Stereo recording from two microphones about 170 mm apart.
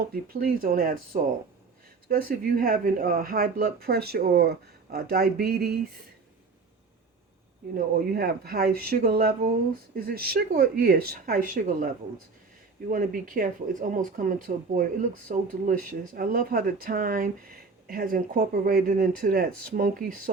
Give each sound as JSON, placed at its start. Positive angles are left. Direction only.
{"t": 0.0, "sound": "speech", "side_deg": -60}
{"t": 7.8, "sound": "speech", "side_deg": -65}
{"t": 12.9, "sound": "speech", "side_deg": -55}